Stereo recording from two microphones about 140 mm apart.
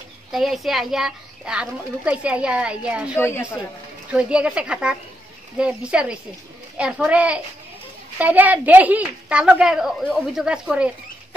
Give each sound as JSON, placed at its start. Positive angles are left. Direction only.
{"t": 0.3, "sound": "a woman's voice", "side_deg": 0}
{"t": 3.2, "sound": "a woman's voice", "side_deg": 20}
{"t": 4.1, "sound": "a woman's voice", "side_deg": -10}